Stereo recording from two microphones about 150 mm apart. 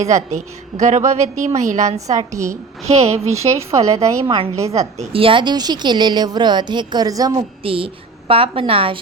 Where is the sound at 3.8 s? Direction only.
20° right (ahead or behind).